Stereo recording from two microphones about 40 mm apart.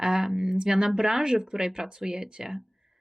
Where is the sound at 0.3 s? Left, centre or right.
Centre.